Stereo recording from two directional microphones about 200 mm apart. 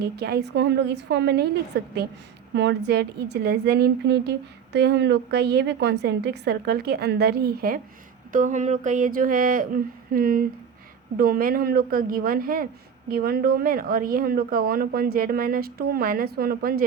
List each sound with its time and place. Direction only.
0.0 s a woman's voice: 55° right (ahead or behind)
2.6 s a woman's voice: 55° right (ahead or behind)